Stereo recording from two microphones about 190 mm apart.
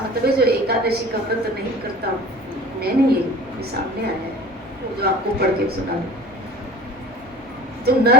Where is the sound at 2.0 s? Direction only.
55° right (ahead or behind).